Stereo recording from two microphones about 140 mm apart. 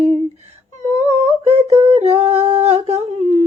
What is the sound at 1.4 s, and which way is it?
Humming, 50° right (ahead or behind).